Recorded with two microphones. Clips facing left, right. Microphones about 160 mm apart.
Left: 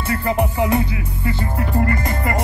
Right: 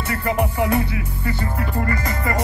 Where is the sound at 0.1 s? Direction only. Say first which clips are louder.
Left 2 dB; 25° left (ahead or behind).